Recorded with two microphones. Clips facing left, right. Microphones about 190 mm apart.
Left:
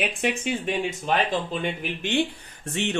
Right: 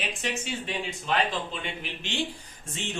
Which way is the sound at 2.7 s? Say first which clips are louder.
Left 8 dB; 70° left (ahead or behind).